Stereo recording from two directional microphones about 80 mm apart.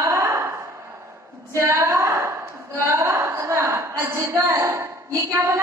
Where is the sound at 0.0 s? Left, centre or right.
Right.